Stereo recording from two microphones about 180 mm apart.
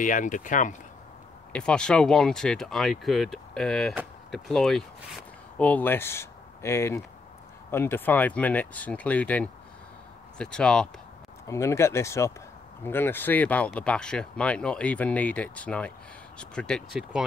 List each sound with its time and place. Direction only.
0.0 s speech: 45° left (ahead or behind)
1.5 s speech: 5° left (ahead or behind)
11.4 s speech: 15° left (ahead or behind)